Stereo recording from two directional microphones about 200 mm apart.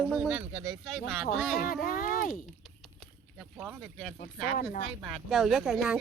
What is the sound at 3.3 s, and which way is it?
A woman's voice, 5° right (ahead or behind).